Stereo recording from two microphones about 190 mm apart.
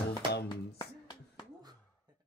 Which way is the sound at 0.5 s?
20° left (ahead or behind).